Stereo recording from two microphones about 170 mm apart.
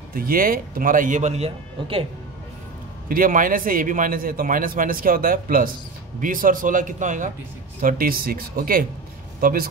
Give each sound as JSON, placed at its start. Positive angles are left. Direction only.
{"t": 0.1, "sound": "a man's voice", "side_deg": -55}
{"t": 3.1, "sound": "a man's voice", "side_deg": -55}
{"t": 7.8, "sound": "a man's voice", "side_deg": -60}